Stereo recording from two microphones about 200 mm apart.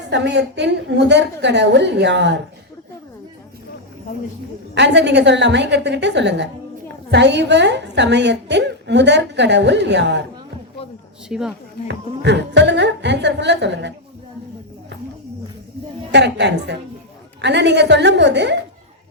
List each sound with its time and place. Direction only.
0.1 s a woman's voice: 60° right (ahead or behind)
4.7 s a woman's voice: 60° right (ahead or behind)
11.3 s speech: 5° right (ahead or behind)
11.9 s a woman's voice: 60° right (ahead or behind)
16.1 s a woman's voice: 60° right (ahead or behind)